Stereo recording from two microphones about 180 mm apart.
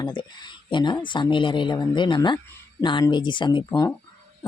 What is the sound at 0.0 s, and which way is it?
Speech, 25° left (ahead or behind).